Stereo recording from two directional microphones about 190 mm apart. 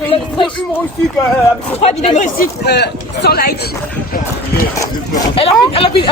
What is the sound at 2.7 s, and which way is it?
Speech, 60° left (ahead or behind).